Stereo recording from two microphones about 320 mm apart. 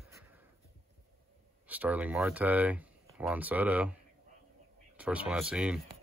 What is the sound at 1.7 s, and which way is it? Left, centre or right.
Speech, centre.